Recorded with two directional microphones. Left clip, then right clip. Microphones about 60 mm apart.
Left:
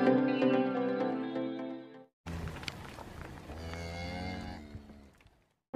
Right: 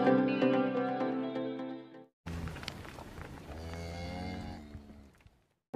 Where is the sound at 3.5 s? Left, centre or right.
Centre.